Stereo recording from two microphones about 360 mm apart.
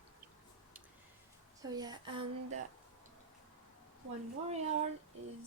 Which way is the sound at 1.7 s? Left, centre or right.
Centre.